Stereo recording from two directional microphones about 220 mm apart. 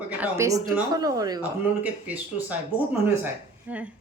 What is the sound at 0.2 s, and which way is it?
Speech, 15° right (ahead or behind).